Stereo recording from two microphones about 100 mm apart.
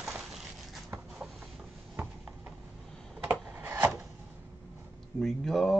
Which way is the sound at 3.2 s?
20° right (ahead or behind).